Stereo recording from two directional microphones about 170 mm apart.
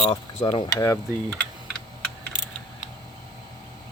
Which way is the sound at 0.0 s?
30° left (ahead or behind).